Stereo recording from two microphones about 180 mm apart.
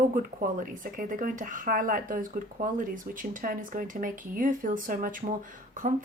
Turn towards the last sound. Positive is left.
turn(degrees=-45)  # may be behind; listen again after turning